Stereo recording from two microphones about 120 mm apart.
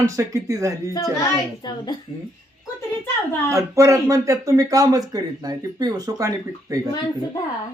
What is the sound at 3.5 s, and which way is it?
Speech, 25° right (ahead or behind).